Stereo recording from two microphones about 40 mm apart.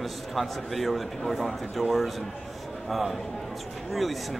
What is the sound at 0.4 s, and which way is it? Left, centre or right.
Speech, centre.